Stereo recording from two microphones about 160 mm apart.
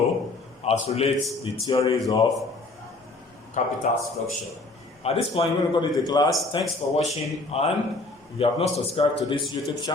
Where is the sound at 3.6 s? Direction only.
50° left (ahead or behind).